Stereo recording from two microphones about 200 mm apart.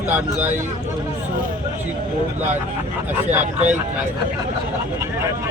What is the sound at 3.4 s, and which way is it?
Speech, 35° right (ahead or behind).